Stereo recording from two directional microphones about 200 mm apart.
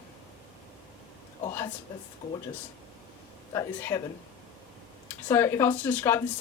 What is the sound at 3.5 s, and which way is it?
Speech, 15° left (ahead or behind).